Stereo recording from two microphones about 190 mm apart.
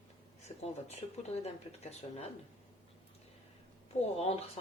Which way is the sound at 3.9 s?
35° left (ahead or behind).